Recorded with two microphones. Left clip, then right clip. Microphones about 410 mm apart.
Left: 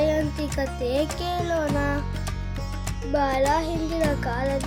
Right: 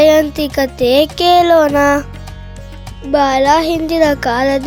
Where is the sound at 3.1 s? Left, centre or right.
Right.